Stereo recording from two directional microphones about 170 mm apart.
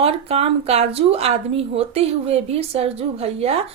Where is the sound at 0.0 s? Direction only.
35° right (ahead or behind).